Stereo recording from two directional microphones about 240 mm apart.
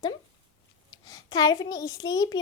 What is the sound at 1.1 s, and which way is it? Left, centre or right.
Speech, centre.